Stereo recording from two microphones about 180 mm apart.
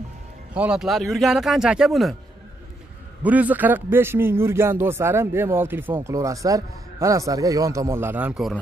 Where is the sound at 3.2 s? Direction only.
10° right (ahead or behind).